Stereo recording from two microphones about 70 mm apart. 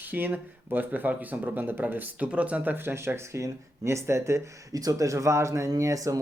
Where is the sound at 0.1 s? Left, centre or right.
Right.